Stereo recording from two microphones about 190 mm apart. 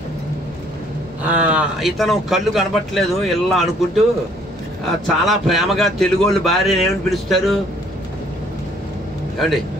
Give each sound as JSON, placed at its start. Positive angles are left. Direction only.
{"t": 1.2, "sound": "speech", "side_deg": -5}
{"t": 5.0, "sound": "speech", "side_deg": 0}